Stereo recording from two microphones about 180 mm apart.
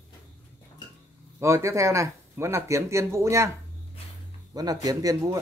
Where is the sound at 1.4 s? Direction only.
15° right (ahead or behind).